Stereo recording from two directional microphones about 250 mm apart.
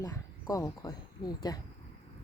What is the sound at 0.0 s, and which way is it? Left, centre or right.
Speech, centre.